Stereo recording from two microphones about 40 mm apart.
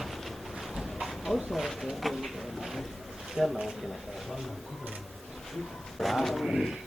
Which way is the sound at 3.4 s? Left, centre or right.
Centre.